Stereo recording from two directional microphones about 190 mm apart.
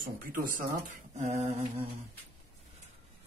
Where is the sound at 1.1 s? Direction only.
35° right (ahead or behind).